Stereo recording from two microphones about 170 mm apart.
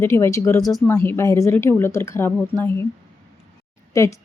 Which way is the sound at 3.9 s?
20° left (ahead or behind).